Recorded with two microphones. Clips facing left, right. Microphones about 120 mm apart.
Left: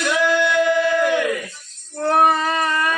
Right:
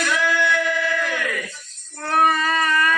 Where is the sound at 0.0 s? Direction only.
20° left (ahead or behind).